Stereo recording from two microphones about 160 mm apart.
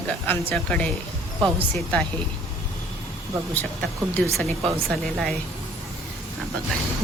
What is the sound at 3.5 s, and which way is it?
Speech, 10° left (ahead or behind).